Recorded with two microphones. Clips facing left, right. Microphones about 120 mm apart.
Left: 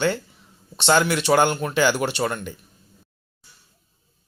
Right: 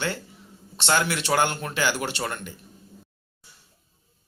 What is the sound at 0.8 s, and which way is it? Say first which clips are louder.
Speech: left 5 dB; 20° left (ahead or behind).